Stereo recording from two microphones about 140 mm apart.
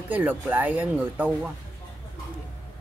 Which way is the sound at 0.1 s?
10° right (ahead or behind).